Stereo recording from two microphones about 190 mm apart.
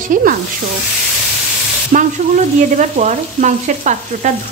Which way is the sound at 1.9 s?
45° right (ahead or behind).